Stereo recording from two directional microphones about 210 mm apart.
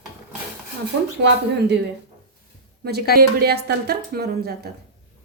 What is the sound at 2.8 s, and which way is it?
A woman's voice, 50° right (ahead or behind).